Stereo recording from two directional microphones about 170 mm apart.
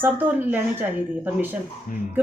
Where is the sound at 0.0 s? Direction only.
10° right (ahead or behind).